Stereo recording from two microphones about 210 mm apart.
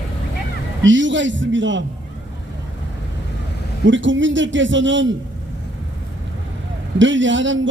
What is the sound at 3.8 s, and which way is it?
A man's voice, 60° right (ahead or behind).